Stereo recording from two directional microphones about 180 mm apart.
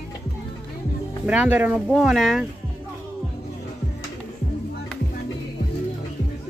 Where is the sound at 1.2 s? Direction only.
5° right (ahead or behind).